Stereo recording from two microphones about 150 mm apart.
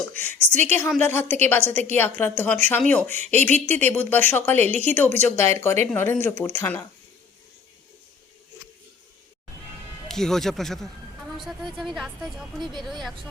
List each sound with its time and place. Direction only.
0.1 s speech: 10° left (ahead or behind)
10.1 s speech: centre (ahead or behind)
12.5 s a woman's voice: 30° right (ahead or behind)
12.8 s speech: centre (ahead or behind)